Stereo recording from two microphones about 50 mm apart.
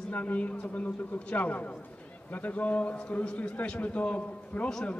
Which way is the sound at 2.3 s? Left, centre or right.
Left.